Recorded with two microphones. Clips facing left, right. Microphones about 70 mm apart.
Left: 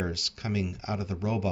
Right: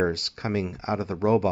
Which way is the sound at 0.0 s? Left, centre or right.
Right.